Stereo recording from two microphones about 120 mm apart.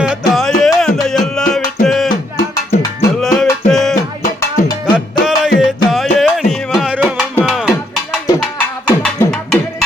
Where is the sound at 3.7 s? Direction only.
Centre (ahead or behind).